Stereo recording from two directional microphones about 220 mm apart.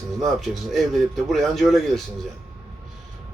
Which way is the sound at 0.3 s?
Centre (ahead or behind).